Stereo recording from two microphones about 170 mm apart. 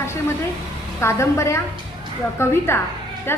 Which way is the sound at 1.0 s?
15° left (ahead or behind).